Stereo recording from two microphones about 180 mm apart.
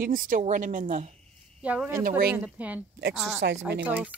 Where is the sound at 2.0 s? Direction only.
50° right (ahead or behind).